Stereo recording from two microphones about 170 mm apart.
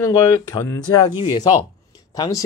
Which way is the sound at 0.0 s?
20° left (ahead or behind).